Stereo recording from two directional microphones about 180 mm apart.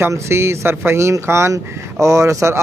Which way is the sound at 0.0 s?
15° right (ahead or behind).